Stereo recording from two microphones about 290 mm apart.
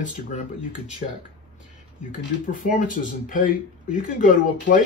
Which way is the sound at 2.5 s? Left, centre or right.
Left.